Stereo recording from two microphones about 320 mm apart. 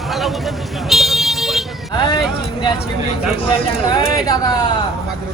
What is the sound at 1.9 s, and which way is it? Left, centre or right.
Vehicle, centre.